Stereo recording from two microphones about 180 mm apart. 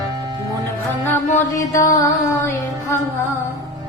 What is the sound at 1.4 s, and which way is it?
Mantra, 15° left (ahead or behind).